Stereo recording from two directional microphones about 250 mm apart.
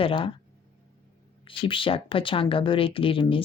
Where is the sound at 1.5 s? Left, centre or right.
Left.